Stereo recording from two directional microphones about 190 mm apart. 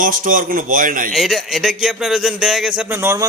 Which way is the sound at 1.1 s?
Centre (ahead or behind).